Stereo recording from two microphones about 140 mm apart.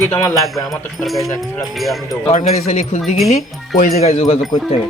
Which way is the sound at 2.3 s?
55° left (ahead or behind).